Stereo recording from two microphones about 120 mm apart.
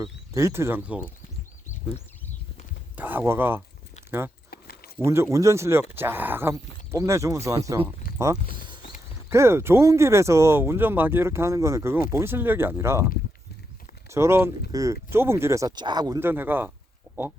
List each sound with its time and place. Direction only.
0.3 s speech: 20° right (ahead or behind)
2.9 s speech: 15° right (ahead or behind)
4.9 s speech: 20° right (ahead or behind)
9.3 s speech: 20° right (ahead or behind)
14.1 s speech: 20° right (ahead or behind)
15.7 s speech: 40° right (ahead or behind)
16.2 s speech: 15° right (ahead or behind)